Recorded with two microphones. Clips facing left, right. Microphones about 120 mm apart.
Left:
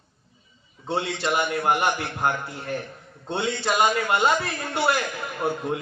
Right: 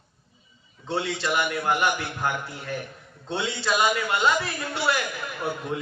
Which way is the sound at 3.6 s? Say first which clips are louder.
Left 1 dB; 50° left (ahead or behind).